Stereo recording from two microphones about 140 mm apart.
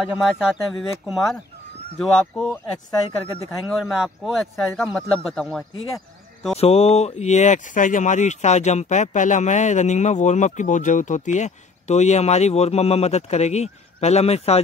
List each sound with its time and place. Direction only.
0.2 s speech: centre (ahead or behind)
6.5 s speech: 45° left (ahead or behind)